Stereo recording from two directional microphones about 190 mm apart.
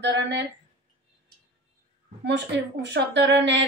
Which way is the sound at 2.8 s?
65° right (ahead or behind).